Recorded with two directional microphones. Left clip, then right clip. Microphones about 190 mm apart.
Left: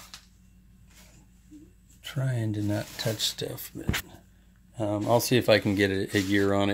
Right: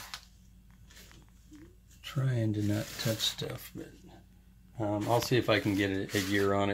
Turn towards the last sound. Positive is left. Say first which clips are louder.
# left 4 dB
turn(degrees=30)  # may be behind; listen again after turning